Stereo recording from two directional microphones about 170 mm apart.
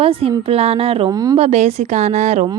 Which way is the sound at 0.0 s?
35° right (ahead or behind).